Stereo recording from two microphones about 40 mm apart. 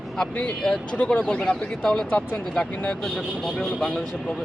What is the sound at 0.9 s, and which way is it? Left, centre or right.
Speech, left.